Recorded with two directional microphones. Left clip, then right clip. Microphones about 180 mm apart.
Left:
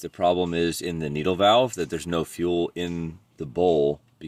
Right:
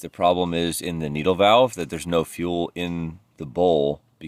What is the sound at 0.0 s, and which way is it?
Speech, 25° right (ahead or behind).